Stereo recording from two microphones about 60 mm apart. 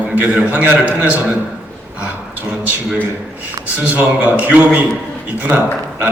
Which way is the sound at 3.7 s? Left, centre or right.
Right.